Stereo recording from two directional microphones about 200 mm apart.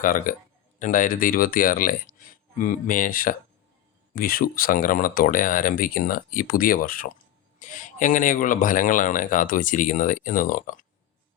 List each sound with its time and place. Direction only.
0.0 s speech: 45° left (ahead or behind)